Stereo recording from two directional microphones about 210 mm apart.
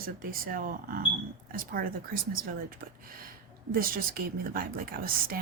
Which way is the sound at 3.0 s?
45° right (ahead or behind).